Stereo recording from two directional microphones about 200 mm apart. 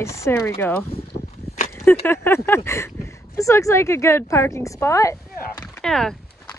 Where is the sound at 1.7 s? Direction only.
10° left (ahead or behind).